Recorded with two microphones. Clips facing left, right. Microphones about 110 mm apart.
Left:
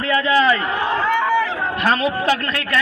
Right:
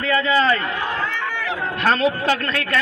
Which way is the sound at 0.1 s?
10° left (ahead or behind).